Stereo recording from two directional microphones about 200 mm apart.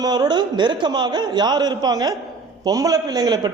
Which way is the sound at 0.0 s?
20° right (ahead or behind).